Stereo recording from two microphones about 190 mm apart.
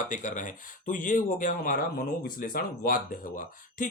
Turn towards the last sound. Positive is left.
turn(degrees=45)  # may be behind; listen again after turning